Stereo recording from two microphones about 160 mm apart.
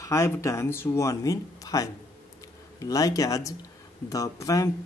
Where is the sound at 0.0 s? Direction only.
20° left (ahead or behind).